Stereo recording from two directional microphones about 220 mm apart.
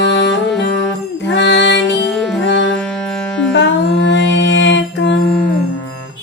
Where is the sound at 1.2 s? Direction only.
55° left (ahead or behind).